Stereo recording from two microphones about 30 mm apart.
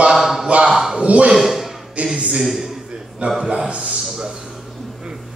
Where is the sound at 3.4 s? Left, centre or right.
Right.